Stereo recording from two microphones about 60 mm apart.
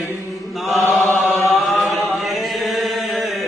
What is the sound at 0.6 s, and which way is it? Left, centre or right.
Chant, centre.